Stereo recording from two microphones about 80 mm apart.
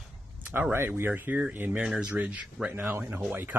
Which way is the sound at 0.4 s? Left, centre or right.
Right.